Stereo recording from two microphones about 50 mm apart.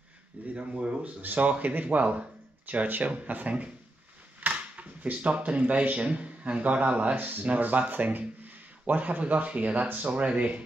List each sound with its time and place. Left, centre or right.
0.6 s speech: right
1.2 s speech: right
7.2 s speech: right
7.4 s speech: right